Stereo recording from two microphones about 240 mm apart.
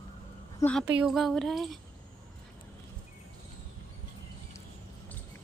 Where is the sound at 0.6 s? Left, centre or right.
Centre.